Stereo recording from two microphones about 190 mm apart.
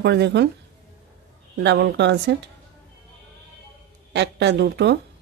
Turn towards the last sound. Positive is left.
turn(degrees=-65)  # may be behind; listen again after turning